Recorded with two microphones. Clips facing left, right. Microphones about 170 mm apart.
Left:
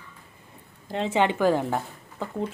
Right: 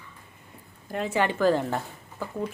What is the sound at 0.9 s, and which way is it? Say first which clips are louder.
Speech: left 3 dB; 25° left (ahead or behind).